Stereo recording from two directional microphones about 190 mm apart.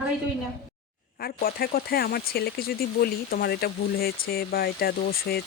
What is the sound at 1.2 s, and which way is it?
Speech, 50° left (ahead or behind).